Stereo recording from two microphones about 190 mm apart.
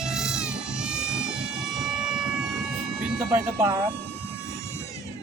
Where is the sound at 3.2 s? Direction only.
15° right (ahead or behind).